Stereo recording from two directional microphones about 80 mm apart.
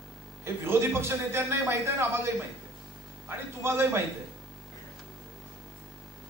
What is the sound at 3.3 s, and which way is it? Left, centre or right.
Speech, right.